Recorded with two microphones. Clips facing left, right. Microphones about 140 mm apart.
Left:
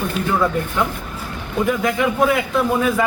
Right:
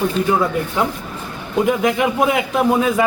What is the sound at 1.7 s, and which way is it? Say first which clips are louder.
Speech: right 1 dB; 20° right (ahead or behind).